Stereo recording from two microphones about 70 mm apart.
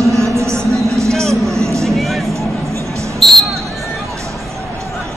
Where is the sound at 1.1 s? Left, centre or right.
Centre.